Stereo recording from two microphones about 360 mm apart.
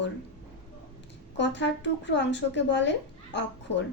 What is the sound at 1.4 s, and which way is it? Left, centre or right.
A woman's voice, left.